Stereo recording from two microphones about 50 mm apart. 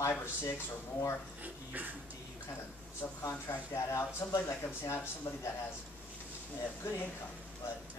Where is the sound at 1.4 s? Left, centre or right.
Right.